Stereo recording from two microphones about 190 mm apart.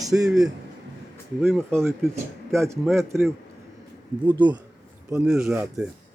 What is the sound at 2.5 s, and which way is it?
Speech, 15° right (ahead or behind).